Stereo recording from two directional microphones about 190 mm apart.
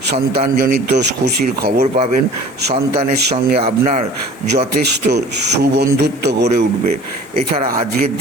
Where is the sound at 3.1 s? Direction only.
55° right (ahead or behind).